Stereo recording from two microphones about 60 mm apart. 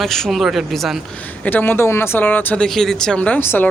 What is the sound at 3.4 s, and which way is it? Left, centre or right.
Speech, left.